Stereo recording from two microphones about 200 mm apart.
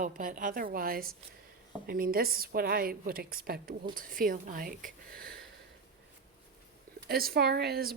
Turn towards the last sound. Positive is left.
turn(degrees=-50)  # may be behind; listen again after turning